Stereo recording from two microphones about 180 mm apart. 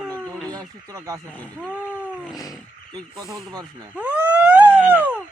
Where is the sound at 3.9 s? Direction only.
10° right (ahead or behind).